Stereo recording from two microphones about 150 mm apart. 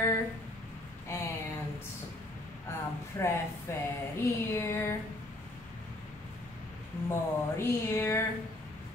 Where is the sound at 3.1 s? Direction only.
20° left (ahead or behind).